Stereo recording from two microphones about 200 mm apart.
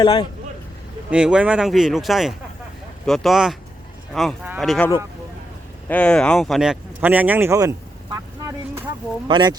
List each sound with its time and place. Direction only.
0.0 s speech: 20° left (ahead or behind)
1.1 s speech: 5° right (ahead or behind)
5.9 s speech: 5° left (ahead or behind); by 9.6 s 25° right (ahead or behind)